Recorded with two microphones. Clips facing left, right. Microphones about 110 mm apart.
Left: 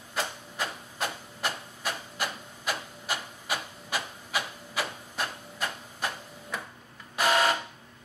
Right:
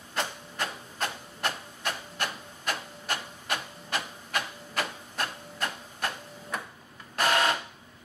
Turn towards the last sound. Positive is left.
turn(degrees=5)  # may be behind; listen again after turning